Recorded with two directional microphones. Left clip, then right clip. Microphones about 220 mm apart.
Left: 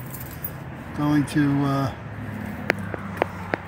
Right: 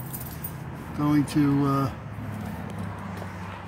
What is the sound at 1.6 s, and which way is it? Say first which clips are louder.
Speech: left 1 dB; 20° left (ahead or behind).